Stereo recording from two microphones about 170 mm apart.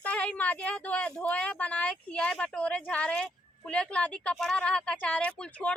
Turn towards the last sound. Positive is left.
turn(degrees=5)  # may be behind; listen again after turning